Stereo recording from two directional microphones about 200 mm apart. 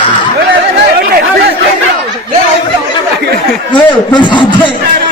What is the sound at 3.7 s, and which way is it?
A man's voice, 25° left (ahead or behind).